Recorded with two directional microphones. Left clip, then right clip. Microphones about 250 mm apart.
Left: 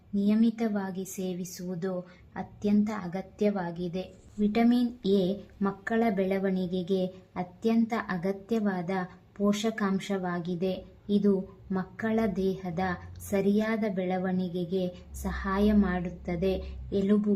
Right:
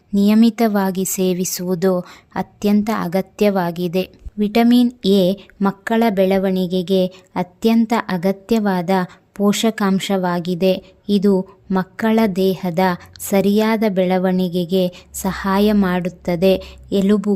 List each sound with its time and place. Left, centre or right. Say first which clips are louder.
0.1 s a woman's voice: right 12 dB; right